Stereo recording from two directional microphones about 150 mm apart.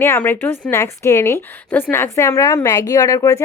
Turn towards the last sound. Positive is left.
turn(degrees=20)  # may be behind; listen again after turning